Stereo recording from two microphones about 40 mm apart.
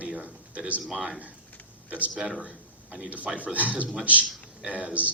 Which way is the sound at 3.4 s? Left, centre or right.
Right.